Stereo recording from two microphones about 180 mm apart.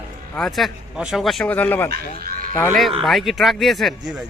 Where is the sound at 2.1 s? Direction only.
55° right (ahead or behind).